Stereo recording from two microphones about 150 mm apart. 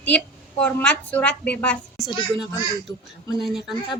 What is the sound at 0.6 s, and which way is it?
A woman's voice, 10° left (ahead or behind).